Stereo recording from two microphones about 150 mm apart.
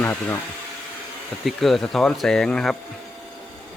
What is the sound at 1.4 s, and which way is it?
Speech, centre (ahead or behind).